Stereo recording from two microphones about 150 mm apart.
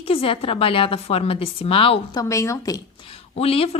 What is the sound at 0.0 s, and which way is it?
Speech, 40° left (ahead or behind).